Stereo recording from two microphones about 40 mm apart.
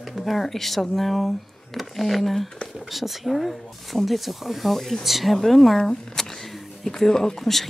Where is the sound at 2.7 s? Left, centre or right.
Centre.